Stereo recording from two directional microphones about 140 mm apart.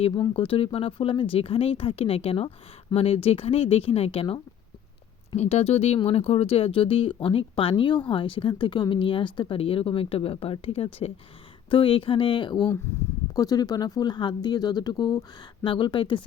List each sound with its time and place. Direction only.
0.3 s speech: 40° left (ahead or behind)
5.4 s speech: 45° left (ahead or behind)
12.9 s speech: 20° left (ahead or behind); by 16.2 s 35° left (ahead or behind)